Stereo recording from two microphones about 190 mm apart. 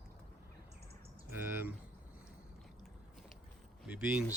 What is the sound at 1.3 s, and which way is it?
Speech, 10° right (ahead or behind).